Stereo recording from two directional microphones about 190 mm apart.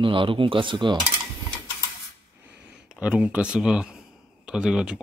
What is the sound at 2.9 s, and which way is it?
Speech, 5° right (ahead or behind).